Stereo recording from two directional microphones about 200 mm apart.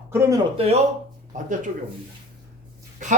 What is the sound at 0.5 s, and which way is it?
Speech, 30° right (ahead or behind).